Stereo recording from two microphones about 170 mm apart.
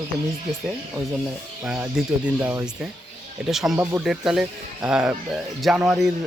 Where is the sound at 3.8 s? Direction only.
15° right (ahead or behind).